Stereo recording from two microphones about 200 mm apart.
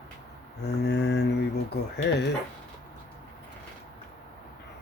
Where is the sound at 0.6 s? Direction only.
60° left (ahead or behind).